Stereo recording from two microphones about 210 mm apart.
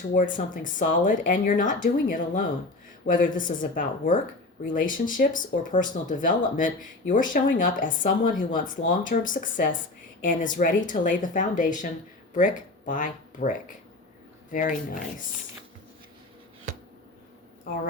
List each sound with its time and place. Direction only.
0.1 s speech: 40° left (ahead or behind)
17.7 s a woman's voice: 45° left (ahead or behind)